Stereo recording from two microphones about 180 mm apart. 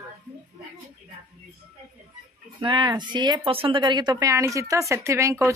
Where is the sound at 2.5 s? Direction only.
25° right (ahead or behind).